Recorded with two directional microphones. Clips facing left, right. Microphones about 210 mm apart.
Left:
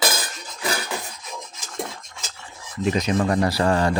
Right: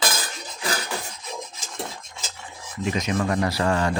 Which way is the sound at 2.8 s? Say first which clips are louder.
Left 3 dB; 35° left (ahead or behind).